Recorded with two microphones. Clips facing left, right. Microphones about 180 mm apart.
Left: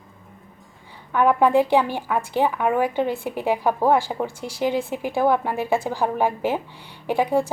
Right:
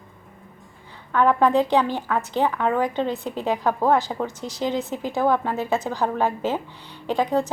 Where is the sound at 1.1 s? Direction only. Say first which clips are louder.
Left 1 dB; 10° left (ahead or behind).